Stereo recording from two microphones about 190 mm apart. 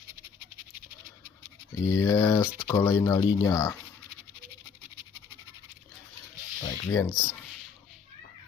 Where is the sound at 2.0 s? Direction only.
20° left (ahead or behind).